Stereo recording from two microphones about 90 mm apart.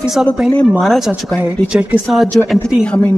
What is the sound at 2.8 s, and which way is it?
Speech, 15° left (ahead or behind).